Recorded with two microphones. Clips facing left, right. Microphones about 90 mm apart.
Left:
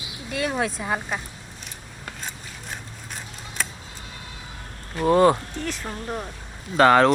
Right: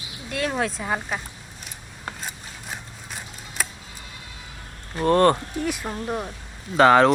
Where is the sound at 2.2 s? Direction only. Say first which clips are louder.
Even; 5° right (ahead or behind).